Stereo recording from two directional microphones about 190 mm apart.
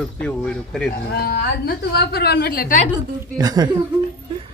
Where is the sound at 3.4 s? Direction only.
20° right (ahead or behind).